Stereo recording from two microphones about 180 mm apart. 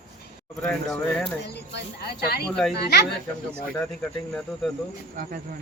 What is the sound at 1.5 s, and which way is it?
Speech, 65° left (ahead or behind).